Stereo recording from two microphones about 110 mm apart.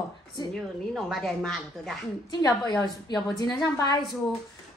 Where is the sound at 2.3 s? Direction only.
40° left (ahead or behind).